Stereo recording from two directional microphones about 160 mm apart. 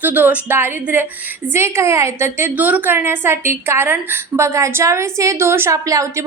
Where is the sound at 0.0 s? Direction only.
10° right (ahead or behind).